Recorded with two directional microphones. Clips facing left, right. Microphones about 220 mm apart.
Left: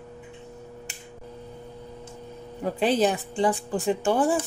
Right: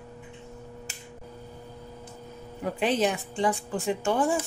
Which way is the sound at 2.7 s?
35° left (ahead or behind).